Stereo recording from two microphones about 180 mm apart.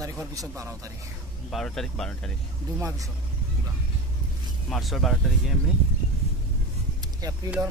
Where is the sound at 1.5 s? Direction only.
Centre (ahead or behind).